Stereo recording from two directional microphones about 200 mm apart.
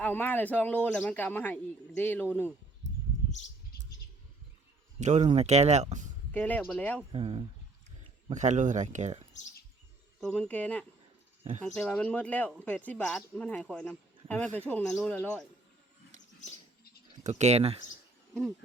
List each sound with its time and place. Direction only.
0.0 s speech: 10° left (ahead or behind)
4.9 s speech: 35° right (ahead or behind)
6.3 s speech: 10° left (ahead or behind)
7.1 s speech: 25° right (ahead or behind)
8.3 s speech: 35° right (ahead or behind)
10.2 s speech: 5° left (ahead or behind)
17.2 s speech: 35° right (ahead or behind)